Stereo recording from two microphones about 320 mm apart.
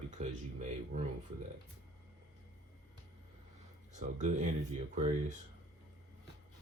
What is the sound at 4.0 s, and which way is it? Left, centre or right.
Speech, right.